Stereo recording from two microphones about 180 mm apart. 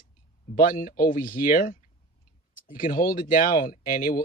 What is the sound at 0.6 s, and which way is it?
Speech, 50° left (ahead or behind).